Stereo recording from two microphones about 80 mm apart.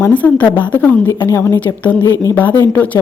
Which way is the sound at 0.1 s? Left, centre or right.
Left.